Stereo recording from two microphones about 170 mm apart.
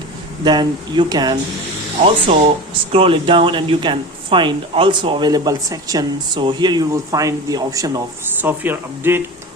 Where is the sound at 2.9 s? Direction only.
30° right (ahead or behind).